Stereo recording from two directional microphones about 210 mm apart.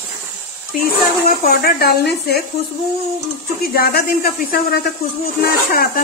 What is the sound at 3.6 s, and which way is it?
A woman's voice, 45° left (ahead or behind).